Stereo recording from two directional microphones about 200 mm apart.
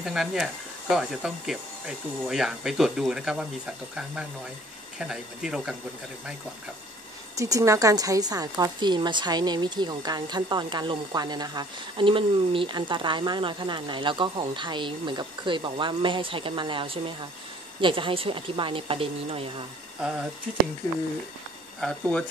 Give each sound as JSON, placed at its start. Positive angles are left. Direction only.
{"t": 0.0, "sound": "speech", "side_deg": -5}
{"t": 7.3, "sound": "a woman's voice", "side_deg": -15}
{"t": 20.0, "sound": "speech", "side_deg": -5}
{"t": 21.7, "sound": "speech", "side_deg": 5}